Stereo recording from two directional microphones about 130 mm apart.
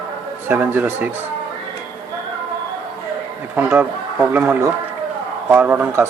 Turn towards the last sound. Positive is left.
turn(degrees=-20)  # may be behind; listen again after turning